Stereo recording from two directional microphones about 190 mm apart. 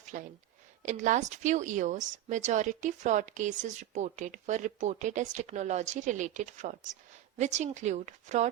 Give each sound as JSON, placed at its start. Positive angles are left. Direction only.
{"t": 0.1, "sound": "speech", "side_deg": -45}